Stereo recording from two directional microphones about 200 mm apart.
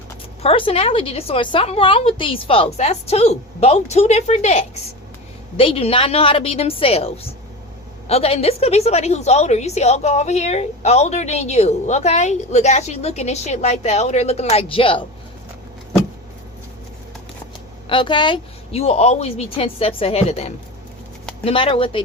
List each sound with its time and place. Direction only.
0.4 s a woman's voice: 30° left (ahead or behind)
17.8 s a woman's voice: 25° left (ahead or behind)